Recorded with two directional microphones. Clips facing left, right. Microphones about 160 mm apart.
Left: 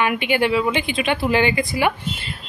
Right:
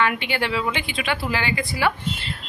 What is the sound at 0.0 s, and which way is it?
Speech, 15° left (ahead or behind).